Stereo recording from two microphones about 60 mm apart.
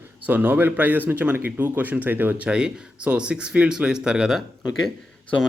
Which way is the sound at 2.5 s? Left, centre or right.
Centre.